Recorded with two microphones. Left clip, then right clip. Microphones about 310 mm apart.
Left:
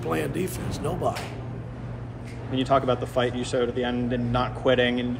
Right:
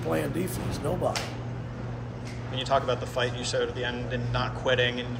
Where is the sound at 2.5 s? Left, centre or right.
Left.